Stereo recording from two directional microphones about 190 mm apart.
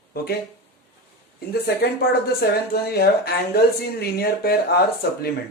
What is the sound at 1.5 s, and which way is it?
Speech, 55° left (ahead or behind).